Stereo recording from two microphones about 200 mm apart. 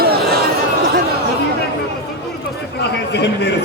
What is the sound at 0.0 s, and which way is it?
Chatter, 50° right (ahead or behind).